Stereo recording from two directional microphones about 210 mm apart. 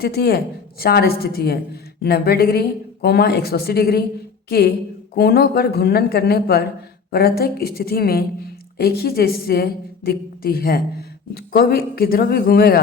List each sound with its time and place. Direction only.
0.0 s a woman's voice: 50° left (ahead or behind)